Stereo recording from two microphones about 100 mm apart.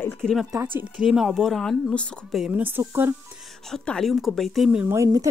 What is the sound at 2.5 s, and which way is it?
Speech, 20° right (ahead or behind).